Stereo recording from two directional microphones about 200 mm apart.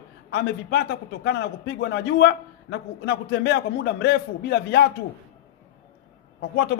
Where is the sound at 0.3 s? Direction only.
60° left (ahead or behind).